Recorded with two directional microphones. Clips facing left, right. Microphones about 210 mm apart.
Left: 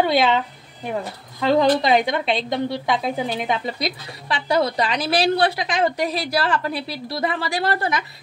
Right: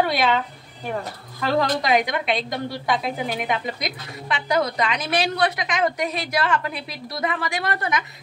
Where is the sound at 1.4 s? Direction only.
20° left (ahead or behind).